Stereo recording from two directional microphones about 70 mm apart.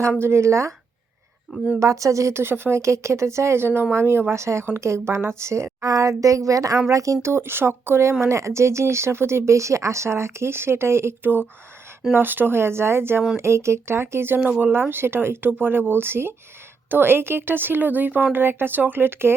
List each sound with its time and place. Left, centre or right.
0.2 s a woman's voice: right
1.8 s a woman's voice: right
5.8 s a woman's voice: right